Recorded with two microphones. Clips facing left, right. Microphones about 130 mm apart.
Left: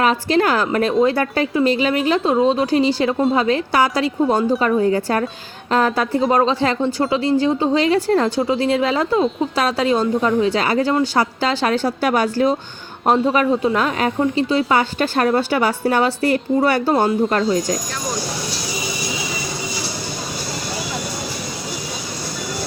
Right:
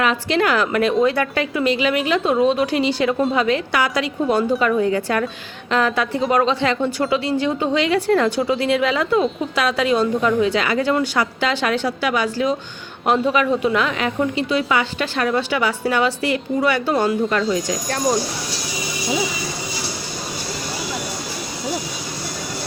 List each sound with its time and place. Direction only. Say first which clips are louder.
0.0 s a woman's voice: left 2 dB; 35° left (ahead or behind)